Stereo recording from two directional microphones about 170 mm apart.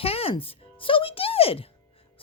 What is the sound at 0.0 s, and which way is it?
Music, 35° left (ahead or behind).